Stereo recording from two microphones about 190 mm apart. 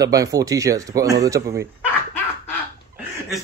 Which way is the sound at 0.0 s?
20° right (ahead or behind).